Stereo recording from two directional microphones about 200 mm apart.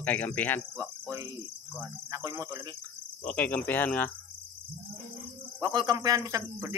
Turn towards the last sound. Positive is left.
turn(degrees=-15)  # may be behind; listen again after turning